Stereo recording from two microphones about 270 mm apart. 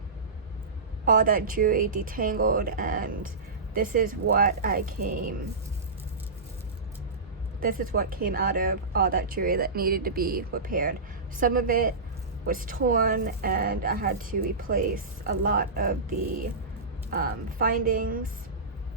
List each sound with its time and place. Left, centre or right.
1.0 s speech: right
7.6 s speech: right
17.1 s speech: right